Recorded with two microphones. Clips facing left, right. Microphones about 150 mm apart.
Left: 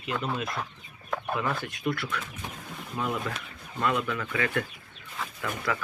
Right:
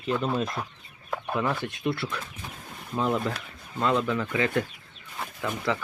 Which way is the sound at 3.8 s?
25° right (ahead or behind).